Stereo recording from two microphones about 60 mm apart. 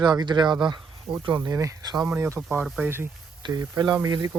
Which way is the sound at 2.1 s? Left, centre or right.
Right.